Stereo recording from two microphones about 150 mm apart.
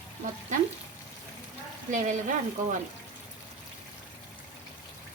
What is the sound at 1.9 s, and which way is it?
Speech, 55° right (ahead or behind).